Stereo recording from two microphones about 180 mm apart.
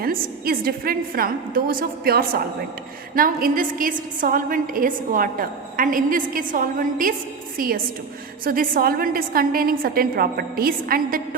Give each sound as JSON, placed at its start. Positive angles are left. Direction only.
{"t": 0.0, "sound": "a woman's voice", "side_deg": -55}
{"t": 8.4, "sound": "a woman's voice", "side_deg": -55}